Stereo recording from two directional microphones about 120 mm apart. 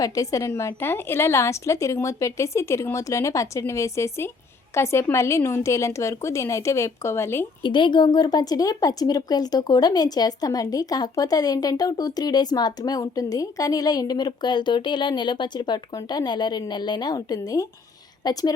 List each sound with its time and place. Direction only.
0.0 s a woman's voice: 30° left (ahead or behind)
7.6 s a woman's voice: 40° left (ahead or behind)